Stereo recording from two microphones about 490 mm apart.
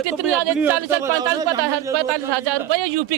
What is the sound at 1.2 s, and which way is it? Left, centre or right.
Speech, centre.